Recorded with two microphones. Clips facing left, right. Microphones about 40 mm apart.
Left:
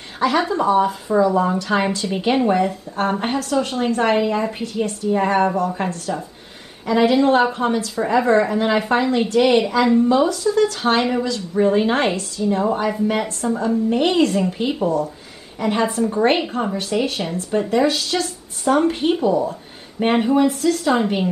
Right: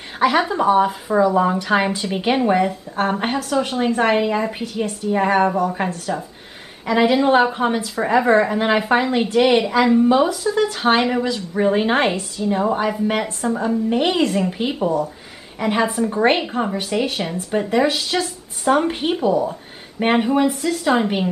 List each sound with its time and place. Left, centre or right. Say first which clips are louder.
0.2 s a woman's voice: right 1 dB; centre